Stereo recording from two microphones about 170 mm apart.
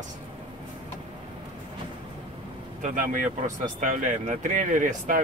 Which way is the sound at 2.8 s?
50° right (ahead or behind).